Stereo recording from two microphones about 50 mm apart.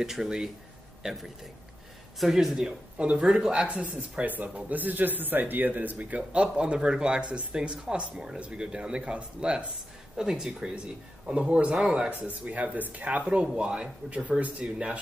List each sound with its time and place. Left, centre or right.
0.0 s speech: centre
2.1 s speech: centre
2.5 s a man's voice: centre
3.6 s a man's voice: right
11.2 s a man's voice: right
12.1 s a man's voice: right